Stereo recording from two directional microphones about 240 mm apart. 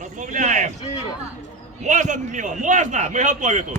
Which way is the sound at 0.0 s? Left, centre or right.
Right.